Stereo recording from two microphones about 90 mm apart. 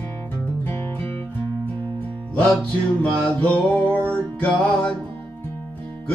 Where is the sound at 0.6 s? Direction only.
30° left (ahead or behind).